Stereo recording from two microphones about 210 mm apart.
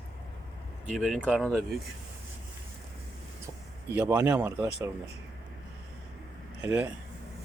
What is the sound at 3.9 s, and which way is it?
Speech, 10° right (ahead or behind).